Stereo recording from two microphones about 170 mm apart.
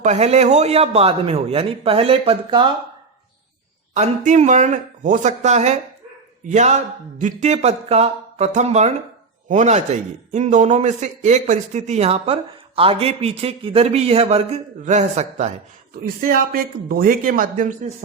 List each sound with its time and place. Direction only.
0.0 s speech: 40° right (ahead or behind)
3.9 s speech: 45° right (ahead or behind)
16.3 s speech: 55° right (ahead or behind)